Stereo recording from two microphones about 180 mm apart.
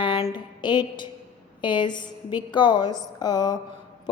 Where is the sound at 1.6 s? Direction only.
25° left (ahead or behind).